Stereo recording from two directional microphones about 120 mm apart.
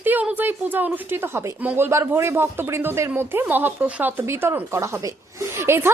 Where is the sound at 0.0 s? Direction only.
15° right (ahead or behind).